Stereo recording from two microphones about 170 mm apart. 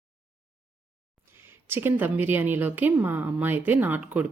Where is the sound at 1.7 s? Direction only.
10° right (ahead or behind).